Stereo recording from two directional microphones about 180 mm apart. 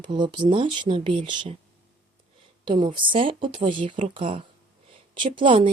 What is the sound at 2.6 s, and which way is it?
Speech, 25° right (ahead or behind).